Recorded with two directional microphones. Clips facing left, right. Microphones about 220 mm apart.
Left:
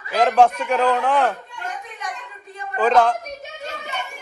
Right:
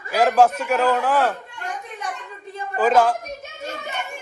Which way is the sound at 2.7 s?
5° right (ahead or behind).